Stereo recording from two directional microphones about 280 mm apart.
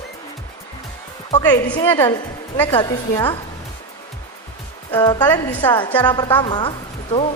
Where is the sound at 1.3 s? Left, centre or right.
Centre.